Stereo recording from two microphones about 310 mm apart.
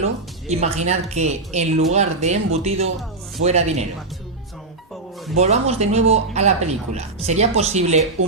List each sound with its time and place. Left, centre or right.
0.4 s speech: right
5.4 s speech: right